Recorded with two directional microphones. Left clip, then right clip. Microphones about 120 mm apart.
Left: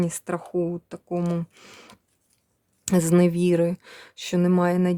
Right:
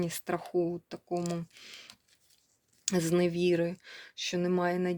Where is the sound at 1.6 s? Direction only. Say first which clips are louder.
Left 2 dB; 60° left (ahead or behind).